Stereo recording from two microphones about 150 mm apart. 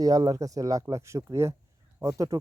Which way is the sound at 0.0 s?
25° right (ahead or behind).